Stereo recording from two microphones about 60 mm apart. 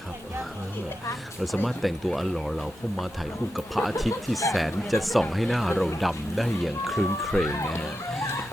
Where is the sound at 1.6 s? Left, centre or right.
Centre.